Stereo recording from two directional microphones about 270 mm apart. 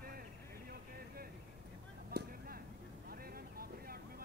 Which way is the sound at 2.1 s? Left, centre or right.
Right.